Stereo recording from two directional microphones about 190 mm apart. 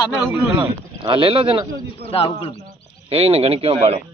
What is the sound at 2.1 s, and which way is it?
Speech, 30° left (ahead or behind).